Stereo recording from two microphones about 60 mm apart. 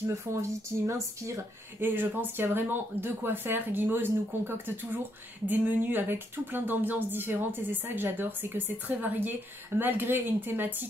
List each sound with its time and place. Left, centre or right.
0.3 s speech: right
1.8 s speech: right